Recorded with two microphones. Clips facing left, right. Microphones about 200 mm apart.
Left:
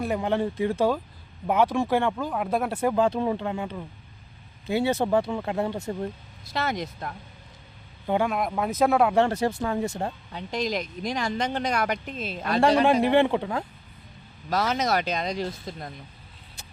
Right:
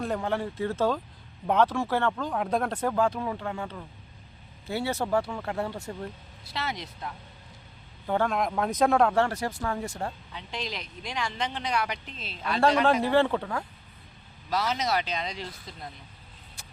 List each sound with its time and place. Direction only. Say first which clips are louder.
0.0 s speech: left 4 dB; 15° left (ahead or behind)
2.9 s speech: left 4 dB; 25° left (ahead or behind)
6.4 s speech: left 6 dB; 45° left (ahead or behind)
8.0 s speech: left 2 dB; 15° left (ahead or behind)
9.1 s speech: left 4 dB; 20° left (ahead or behind)
10.3 s speech: left 8 dB; 45° left (ahead or behind)
12.8 s speech: left 3 dB; 15° left (ahead or behind)
14.5 s speech: left 3 dB; 50° left (ahead or behind)